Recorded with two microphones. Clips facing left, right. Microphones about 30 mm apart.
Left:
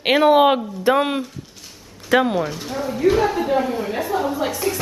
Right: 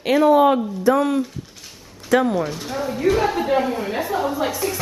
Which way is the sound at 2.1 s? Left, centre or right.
Left.